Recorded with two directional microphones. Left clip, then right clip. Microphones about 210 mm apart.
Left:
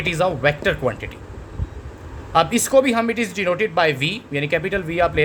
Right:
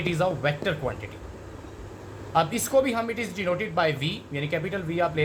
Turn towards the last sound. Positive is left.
turn(degrees=55)  # may be behind; listen again after turning